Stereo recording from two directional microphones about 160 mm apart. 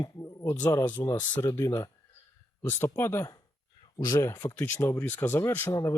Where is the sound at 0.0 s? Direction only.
20° left (ahead or behind).